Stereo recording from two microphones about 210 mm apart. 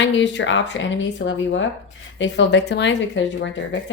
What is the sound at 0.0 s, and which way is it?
Speech, 55° left (ahead or behind).